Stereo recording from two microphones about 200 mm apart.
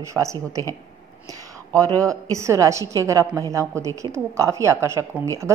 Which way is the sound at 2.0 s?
15° right (ahead or behind).